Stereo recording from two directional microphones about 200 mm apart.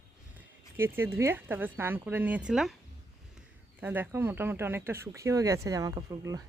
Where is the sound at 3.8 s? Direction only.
10° right (ahead or behind).